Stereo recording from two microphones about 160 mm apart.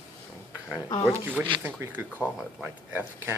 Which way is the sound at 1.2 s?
10° right (ahead or behind).